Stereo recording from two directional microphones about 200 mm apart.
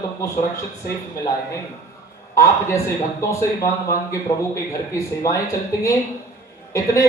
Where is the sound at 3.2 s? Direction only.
15° left (ahead or behind).